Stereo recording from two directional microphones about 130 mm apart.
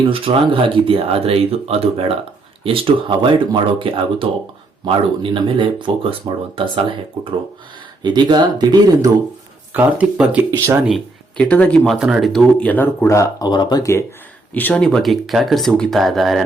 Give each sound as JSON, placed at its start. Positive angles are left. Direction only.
{"t": 0.1, "sound": "speech", "side_deg": -45}
{"t": 8.0, "sound": "speech", "side_deg": -35}
{"t": 9.7, "sound": "speech", "side_deg": -10}
{"t": 10.8, "sound": "a sound", "side_deg": 0}
{"t": 11.4, "sound": "speech", "side_deg": 10}
{"t": 11.9, "sound": "speech", "side_deg": -5}
{"t": 12.3, "sound": "speech", "side_deg": 10}
{"t": 13.5, "sound": "speech", "side_deg": 35}
{"t": 14.5, "sound": "speech", "side_deg": 10}